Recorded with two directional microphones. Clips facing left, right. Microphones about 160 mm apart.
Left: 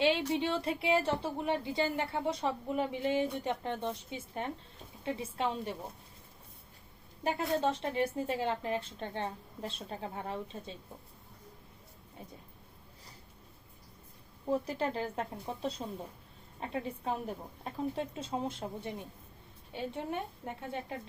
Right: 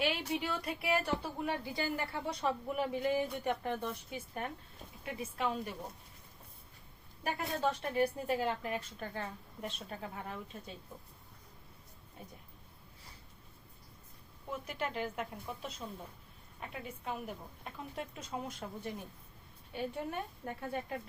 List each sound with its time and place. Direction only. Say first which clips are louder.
0.3 s a woman's voice: left 5 dB; 25° left (ahead or behind)
7.3 s a woman's voice: left 4 dB; 25° left (ahead or behind)
14.4 s a woman's voice: left 7 dB; 35° left (ahead or behind)